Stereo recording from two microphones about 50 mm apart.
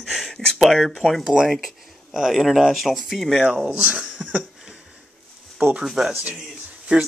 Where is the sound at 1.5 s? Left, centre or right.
Centre.